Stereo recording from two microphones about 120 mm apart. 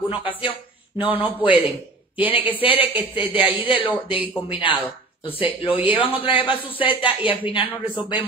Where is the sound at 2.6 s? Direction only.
50° left (ahead or behind).